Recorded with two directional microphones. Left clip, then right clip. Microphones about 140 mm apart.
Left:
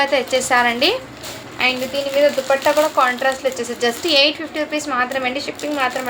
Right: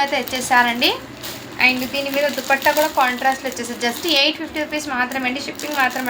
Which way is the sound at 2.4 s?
20° left (ahead or behind).